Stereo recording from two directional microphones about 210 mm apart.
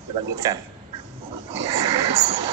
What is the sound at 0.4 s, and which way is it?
Speech, 15° right (ahead or behind).